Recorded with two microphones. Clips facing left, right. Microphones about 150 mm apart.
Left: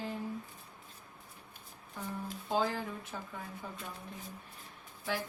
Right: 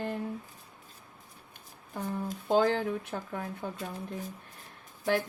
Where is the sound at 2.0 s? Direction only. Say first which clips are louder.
Right 6 dB; 45° right (ahead or behind).